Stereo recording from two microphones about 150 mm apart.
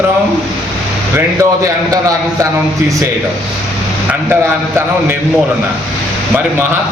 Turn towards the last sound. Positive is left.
turn(degrees=-15)  # may be behind; listen again after turning